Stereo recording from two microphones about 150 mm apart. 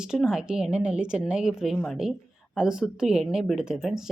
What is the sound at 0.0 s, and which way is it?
Speech, 5° right (ahead or behind).